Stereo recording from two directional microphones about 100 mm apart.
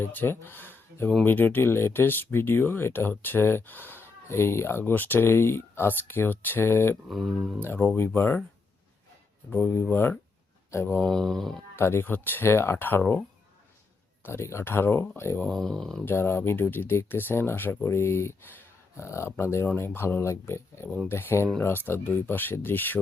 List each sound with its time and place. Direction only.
0.0 s speech: 20° left (ahead or behind)
0.7 s a sound: 20° left (ahead or behind)
1.2 s speech: 20° left (ahead or behind)
7.1 s speech: centre (ahead or behind)
7.9 s speech: 20° left (ahead or behind)
9.5 s speech: 15° left (ahead or behind)
10.9 s speech: 5° left (ahead or behind)
11.8 s speech: 25° left (ahead or behind)
14.3 s speech: 25° left (ahead or behind)
15.4 s speech: 5° left (ahead or behind)
16.0 s speech: 20° left (ahead or behind)